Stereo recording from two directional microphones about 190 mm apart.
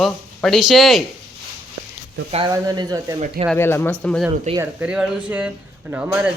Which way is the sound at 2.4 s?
20° right (ahead or behind).